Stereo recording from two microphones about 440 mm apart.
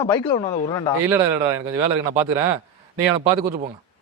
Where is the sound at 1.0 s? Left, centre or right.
Centre.